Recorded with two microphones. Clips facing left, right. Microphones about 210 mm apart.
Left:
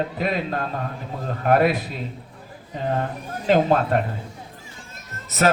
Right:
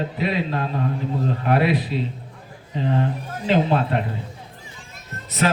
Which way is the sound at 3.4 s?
45° left (ahead or behind).